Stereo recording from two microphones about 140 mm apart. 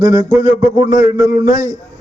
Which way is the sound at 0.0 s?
25° right (ahead or behind).